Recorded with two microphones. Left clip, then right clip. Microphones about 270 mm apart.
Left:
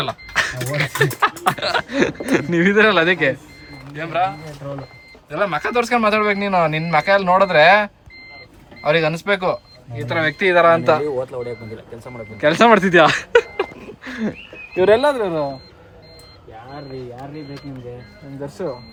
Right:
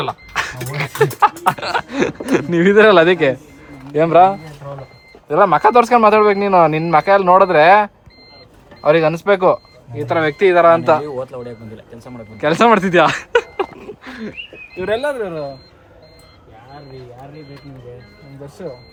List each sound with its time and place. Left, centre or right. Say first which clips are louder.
0.0 s speech: left 1 dB; centre
18.4 s speech: left 4 dB; centre